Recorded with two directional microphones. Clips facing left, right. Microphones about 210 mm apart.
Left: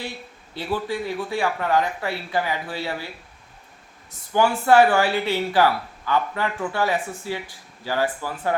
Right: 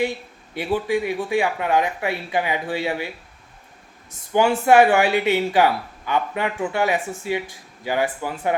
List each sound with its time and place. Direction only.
0.5 s speech: 15° right (ahead or behind)
4.3 s speech: 20° right (ahead or behind)